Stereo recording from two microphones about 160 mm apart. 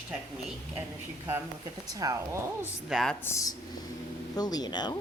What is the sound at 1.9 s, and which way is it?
Speech, 20° right (ahead or behind).